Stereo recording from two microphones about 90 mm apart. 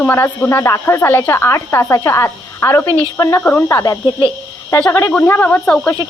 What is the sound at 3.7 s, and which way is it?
Speech, 35° left (ahead or behind).